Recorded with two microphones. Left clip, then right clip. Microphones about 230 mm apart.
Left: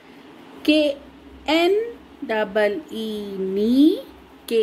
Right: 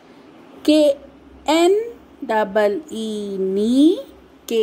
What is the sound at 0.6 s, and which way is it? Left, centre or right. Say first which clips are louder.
Speech: right 4 dB; centre.